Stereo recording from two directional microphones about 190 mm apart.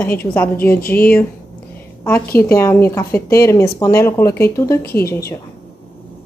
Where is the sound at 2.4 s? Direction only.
15° left (ahead or behind).